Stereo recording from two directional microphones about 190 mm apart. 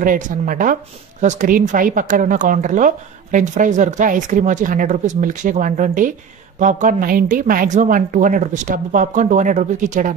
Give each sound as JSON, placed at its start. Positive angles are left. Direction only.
{"t": 0.0, "sound": "a woman's voice", "side_deg": -45}